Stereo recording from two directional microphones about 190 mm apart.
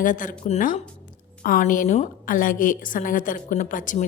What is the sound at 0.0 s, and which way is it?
A woman's voice, 45° left (ahead or behind).